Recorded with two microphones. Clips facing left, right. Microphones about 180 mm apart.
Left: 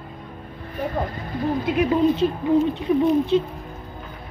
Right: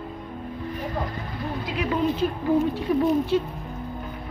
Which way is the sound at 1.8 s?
25° left (ahead or behind).